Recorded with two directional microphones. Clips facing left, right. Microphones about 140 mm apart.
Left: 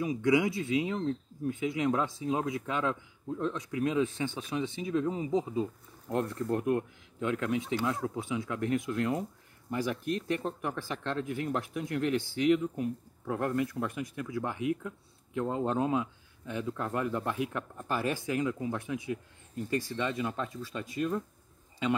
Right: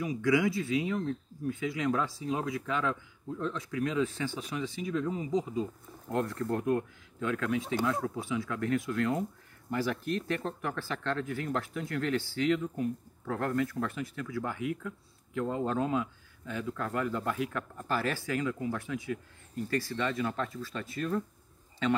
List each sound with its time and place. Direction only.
0.0 s speech: 20° left (ahead or behind)